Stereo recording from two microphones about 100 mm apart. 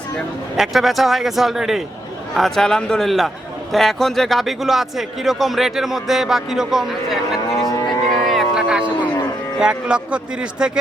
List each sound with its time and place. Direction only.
0.5 s a man's voice: centre (ahead or behind)
8.1 s music: centre (ahead or behind)
9.6 s speech: 10° right (ahead or behind)